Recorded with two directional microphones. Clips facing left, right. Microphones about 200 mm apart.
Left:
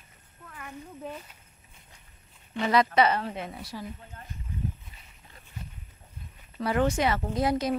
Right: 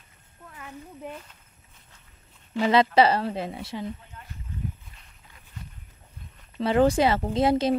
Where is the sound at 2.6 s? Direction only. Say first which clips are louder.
Right 4 dB; 25° right (ahead or behind).